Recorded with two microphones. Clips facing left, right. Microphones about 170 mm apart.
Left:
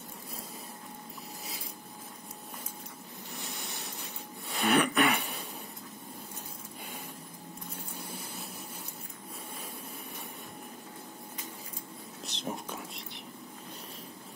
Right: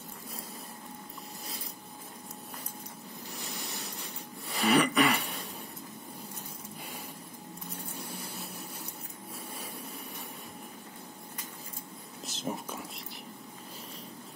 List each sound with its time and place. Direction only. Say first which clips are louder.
3.3 s wheeze: even; centre (ahead or behind)
7.9 s a sound: right 1 dB; centre (ahead or behind)
12.3 s whispering: right 2 dB; centre (ahead or behind)